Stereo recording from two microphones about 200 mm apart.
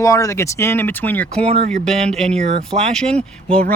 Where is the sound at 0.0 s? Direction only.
15° left (ahead or behind).